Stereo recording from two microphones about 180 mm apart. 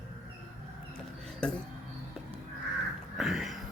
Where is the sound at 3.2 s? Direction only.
Centre (ahead or behind).